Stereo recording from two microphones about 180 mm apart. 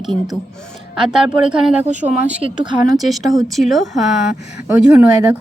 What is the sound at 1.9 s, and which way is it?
Speech, 40° right (ahead or behind).